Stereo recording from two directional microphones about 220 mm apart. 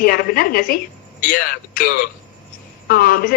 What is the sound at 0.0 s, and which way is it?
A woman's voice, 45° left (ahead or behind).